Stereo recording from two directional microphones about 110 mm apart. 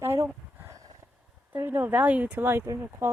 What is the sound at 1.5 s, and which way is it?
Speech, 20° right (ahead or behind).